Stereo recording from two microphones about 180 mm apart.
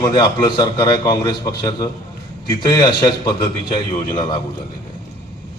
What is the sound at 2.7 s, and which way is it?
A man's voice, 20° left (ahead or behind).